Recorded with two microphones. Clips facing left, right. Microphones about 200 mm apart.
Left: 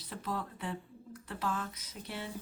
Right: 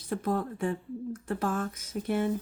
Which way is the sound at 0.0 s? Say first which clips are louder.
Right 9 dB; 50° right (ahead or behind).